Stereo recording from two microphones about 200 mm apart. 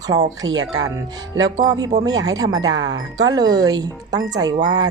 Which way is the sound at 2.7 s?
70° right (ahead or behind).